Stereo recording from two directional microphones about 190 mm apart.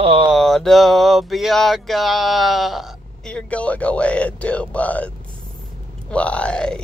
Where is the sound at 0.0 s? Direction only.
30° right (ahead or behind).